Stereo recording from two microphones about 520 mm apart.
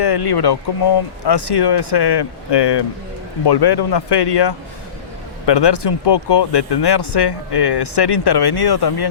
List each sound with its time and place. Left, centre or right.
0.0 s speech: left